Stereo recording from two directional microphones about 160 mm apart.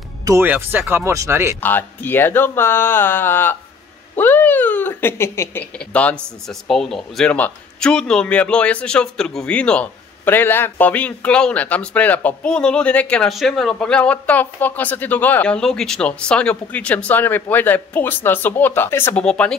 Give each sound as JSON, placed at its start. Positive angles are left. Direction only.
{"t": 0.2, "sound": "speech", "side_deg": -15}
{"t": 1.6, "sound": "speech", "side_deg": 10}